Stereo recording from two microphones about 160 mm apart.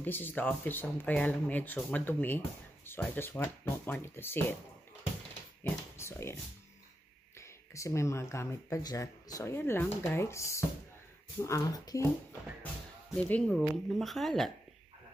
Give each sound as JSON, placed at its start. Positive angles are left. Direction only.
{"t": 0.0, "sound": "speech", "side_deg": 10}
{"t": 5.6, "sound": "dog", "side_deg": 15}
{"t": 7.3, "sound": "speech", "side_deg": 20}
{"t": 13.1, "sound": "speech", "side_deg": 5}